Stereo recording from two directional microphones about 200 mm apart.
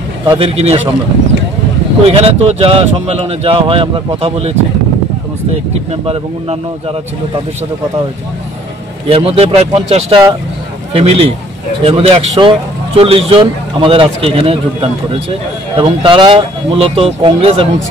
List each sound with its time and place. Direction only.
0.3 s speech: 30° right (ahead or behind)
2.0 s speech: 30° right (ahead or behind)
9.1 s a man's voice: 30° right (ahead or behind)